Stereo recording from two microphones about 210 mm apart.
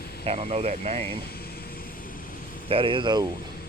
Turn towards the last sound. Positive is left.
turn(degrees=-20)  # may be behind; listen again after turning